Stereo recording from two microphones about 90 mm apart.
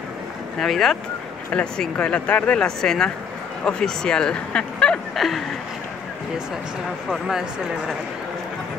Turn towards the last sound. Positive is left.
turn(degrees=0)  # may be behind; listen again after turning